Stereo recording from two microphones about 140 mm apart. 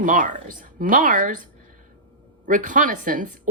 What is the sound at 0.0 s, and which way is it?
Speech, 70° right (ahead or behind).